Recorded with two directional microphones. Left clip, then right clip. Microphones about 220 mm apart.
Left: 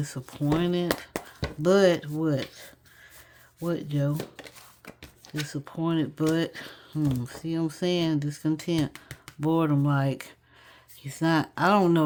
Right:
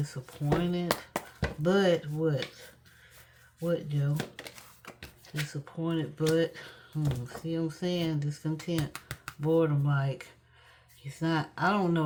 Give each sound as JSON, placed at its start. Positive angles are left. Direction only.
{"t": 0.0, "sound": "speech", "side_deg": 50}
{"t": 5.5, "sound": "speech", "side_deg": 50}